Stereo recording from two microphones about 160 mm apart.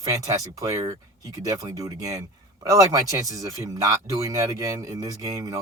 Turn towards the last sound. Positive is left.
turn(degrees=-20)  # may be behind; listen again after turning